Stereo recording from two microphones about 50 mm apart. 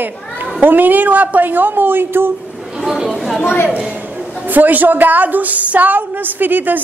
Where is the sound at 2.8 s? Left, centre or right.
Centre.